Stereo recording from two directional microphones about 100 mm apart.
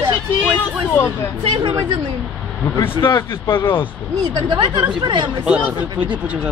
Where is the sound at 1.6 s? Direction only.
50° right (ahead or behind).